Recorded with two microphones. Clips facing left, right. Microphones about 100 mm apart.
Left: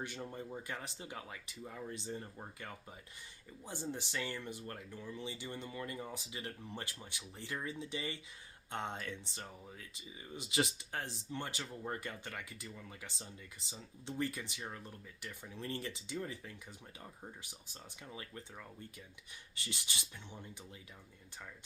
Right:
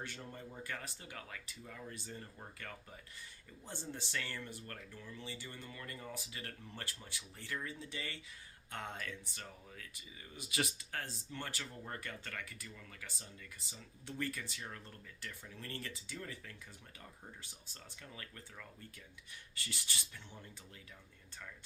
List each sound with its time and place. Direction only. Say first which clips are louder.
0.0 s speech: left 4 dB; 15° left (ahead or behind)